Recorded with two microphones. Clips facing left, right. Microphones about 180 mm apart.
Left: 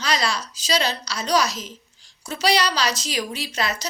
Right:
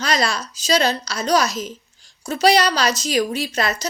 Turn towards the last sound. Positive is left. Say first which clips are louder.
# right 4 dB
turn(degrees=-50)  # may be behind; listen again after turning